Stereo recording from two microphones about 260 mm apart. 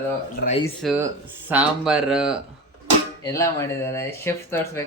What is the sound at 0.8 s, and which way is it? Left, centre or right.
Speech, centre.